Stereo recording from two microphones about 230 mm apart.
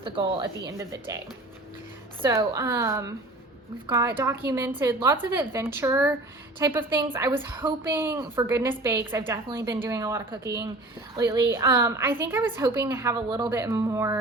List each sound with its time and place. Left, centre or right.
0.0 s a woman's voice: right
2.2 s a woman's voice: centre